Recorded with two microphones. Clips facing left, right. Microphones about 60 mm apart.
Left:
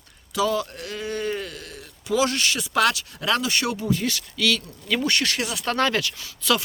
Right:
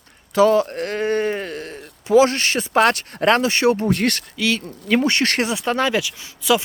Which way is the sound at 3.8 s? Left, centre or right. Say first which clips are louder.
Right 5 dB; right.